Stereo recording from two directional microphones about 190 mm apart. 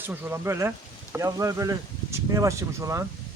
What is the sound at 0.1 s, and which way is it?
Speech, 10° right (ahead or behind).